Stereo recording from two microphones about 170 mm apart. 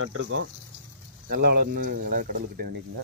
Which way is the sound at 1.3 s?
70° right (ahead or behind).